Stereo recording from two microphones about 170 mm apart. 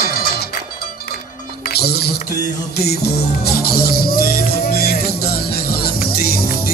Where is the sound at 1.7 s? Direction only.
70° left (ahead or behind).